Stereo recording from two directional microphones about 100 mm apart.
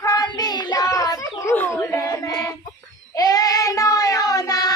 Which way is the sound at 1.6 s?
25° left (ahead or behind).